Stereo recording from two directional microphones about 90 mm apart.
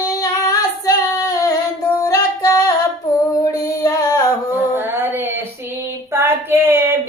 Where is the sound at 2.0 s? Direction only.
40° left (ahead or behind).